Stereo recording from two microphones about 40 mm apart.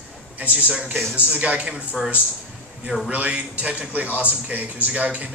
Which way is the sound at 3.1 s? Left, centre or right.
Right.